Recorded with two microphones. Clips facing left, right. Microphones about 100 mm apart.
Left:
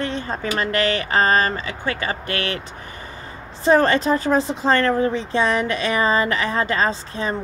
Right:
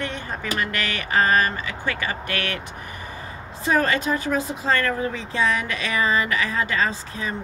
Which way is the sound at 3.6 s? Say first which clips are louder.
Left 6 dB; 30° left (ahead or behind).